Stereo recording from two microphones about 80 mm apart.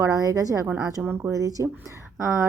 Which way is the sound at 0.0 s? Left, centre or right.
Right.